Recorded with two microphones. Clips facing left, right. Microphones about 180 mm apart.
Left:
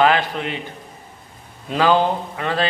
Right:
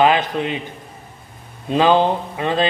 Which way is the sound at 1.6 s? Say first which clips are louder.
Right 2 dB; 20° right (ahead or behind).